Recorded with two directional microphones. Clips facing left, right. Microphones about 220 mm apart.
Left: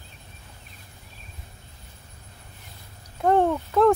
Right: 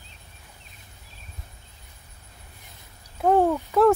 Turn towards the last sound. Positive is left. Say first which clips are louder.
# right 1 dB
turn(degrees=-5)  # may be behind; listen again after turning